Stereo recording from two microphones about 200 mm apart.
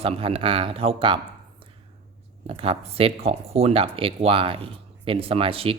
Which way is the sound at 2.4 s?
30° right (ahead or behind).